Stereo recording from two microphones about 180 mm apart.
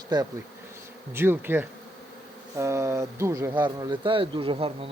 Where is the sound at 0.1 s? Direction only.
25° right (ahead or behind).